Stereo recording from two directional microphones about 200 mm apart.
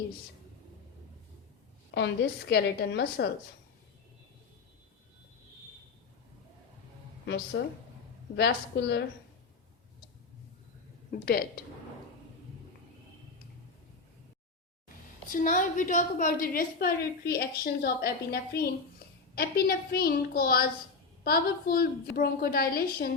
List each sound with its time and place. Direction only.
1.9 s a woman's voice: 60° left (ahead or behind)
7.3 s a woman's voice: 60° left (ahead or behind)
11.1 s a woman's voice: 50° left (ahead or behind)
15.3 s a woman's voice: 40° left (ahead or behind)